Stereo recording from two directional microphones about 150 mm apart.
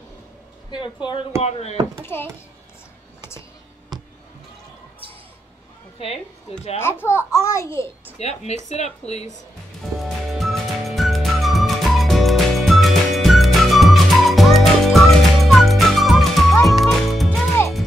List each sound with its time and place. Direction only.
0.7 s a woman's voice: 30° left (ahead or behind)
1.4 s speech: 45° left (ahead or behind)
6.8 s a child's voice: 15° left (ahead or behind)
8.2 s speech: 45° left (ahead or behind)
10.0 s music: centre (ahead or behind)